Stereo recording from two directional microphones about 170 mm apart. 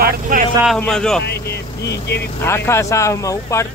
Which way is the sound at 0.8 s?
5° left (ahead or behind).